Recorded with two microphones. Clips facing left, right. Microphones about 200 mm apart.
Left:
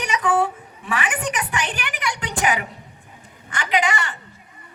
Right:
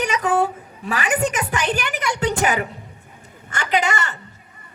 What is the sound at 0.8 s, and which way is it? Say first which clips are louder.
Speech: right 4 dB; 40° right (ahead or behind).